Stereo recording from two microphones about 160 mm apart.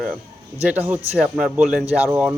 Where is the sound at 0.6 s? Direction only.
10° right (ahead or behind).